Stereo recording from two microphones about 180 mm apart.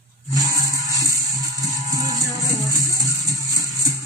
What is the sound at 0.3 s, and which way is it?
Music, 20° right (ahead or behind).